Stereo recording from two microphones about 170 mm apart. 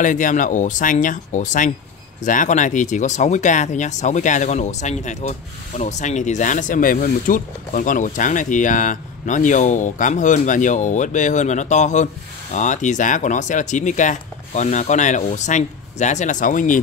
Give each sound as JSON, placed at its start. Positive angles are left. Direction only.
{"t": 0.0, "sound": "speech", "side_deg": 50}